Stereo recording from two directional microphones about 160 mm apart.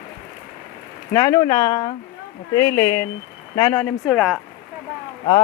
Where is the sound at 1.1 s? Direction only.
20° left (ahead or behind).